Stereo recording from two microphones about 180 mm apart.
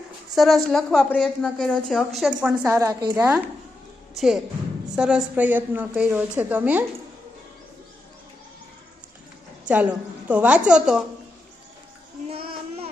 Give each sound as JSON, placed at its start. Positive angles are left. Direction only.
{"t": 0.3, "sound": "a woman's voice", "side_deg": 0}
{"t": 3.2, "sound": "a woman's voice", "side_deg": -10}
{"t": 9.6, "sound": "a woman's voice", "side_deg": -5}
{"t": 12.3, "sound": "child singing", "side_deg": -35}